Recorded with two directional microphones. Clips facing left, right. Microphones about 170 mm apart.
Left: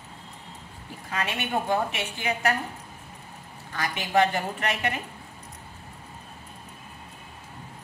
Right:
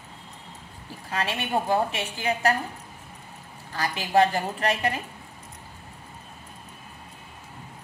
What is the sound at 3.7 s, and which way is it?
A woman's voice, 35° right (ahead or behind).